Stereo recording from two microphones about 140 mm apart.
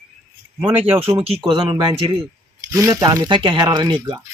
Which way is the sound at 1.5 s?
30° right (ahead or behind).